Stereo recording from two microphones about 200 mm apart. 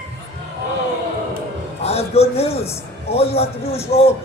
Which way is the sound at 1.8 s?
30° left (ahead or behind).